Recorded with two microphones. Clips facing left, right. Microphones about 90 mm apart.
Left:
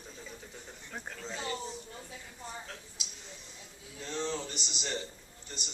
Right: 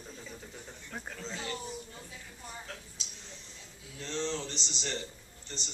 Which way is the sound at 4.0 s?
10° left (ahead or behind).